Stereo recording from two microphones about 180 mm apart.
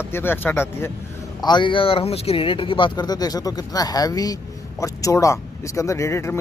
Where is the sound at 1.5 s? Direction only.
25° left (ahead or behind).